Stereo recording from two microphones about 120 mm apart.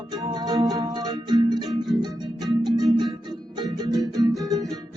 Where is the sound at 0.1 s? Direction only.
35° right (ahead or behind).